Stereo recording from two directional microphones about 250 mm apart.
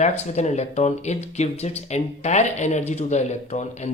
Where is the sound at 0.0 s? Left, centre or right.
Left.